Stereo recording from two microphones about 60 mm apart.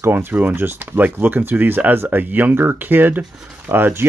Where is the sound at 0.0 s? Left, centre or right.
Right.